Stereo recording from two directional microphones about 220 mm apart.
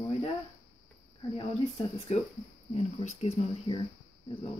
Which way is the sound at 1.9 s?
20° left (ahead or behind).